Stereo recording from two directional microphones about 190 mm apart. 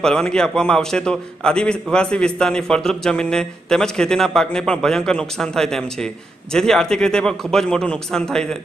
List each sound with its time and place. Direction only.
0.0 s a man's voice: 5° left (ahead or behind)